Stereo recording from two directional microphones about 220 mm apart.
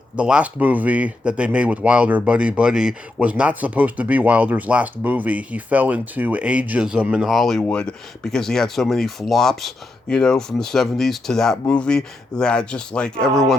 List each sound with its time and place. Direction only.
0.2 s speech: 5° right (ahead or behind)